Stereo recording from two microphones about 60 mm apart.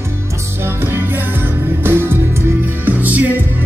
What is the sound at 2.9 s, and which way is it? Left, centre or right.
Music, right.